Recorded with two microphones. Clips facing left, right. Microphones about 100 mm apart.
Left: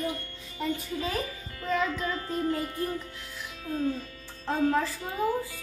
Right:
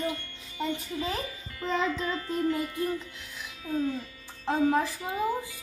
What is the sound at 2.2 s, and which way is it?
Music, 35° left (ahead or behind).